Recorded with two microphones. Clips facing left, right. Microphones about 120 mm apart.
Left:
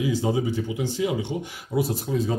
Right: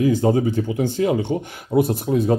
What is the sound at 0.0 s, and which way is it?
Speech, 55° right (ahead or behind).